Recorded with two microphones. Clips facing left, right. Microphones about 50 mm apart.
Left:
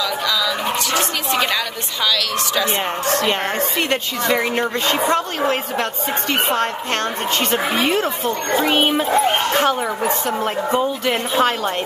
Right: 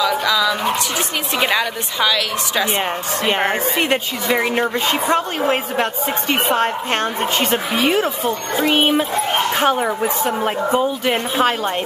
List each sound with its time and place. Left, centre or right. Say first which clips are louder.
0.0 s music: right 4 dB; centre
1.4 s speech: right 3 dB; centre